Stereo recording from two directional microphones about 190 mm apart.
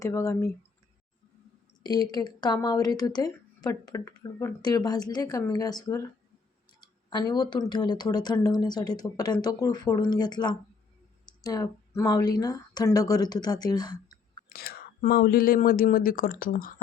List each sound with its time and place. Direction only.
0.0 s speech: 15° left (ahead or behind)
1.8 s speech: 20° left (ahead or behind)
7.1 s speech: 20° left (ahead or behind)
14.5 s speech: 55° left (ahead or behind)